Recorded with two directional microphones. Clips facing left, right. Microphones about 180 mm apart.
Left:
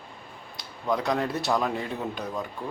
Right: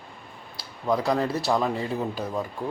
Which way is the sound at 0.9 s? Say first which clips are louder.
Right 2 dB; centre (ahead or behind).